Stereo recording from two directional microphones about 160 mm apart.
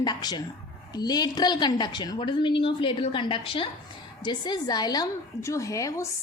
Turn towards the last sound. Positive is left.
turn(degrees=20)  # may be behind; listen again after turning